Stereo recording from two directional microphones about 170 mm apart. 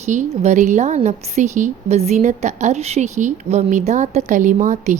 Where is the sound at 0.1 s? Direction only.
45° right (ahead or behind).